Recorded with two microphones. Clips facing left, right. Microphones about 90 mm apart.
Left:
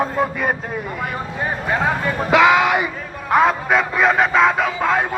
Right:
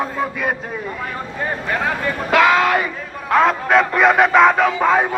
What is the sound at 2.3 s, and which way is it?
Speech, 20° left (ahead or behind).